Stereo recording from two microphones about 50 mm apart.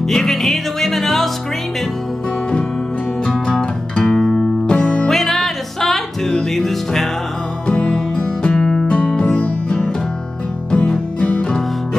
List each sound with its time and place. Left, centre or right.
0.0 s music: centre
3.3 s music: centre
4.6 s music: left
5.0 s music: centre
7.6 s music: left